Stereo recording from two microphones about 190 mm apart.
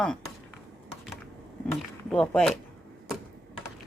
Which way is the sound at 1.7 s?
5° left (ahead or behind).